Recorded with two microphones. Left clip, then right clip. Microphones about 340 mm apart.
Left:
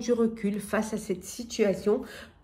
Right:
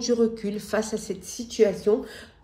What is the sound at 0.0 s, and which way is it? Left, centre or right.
Speech, centre.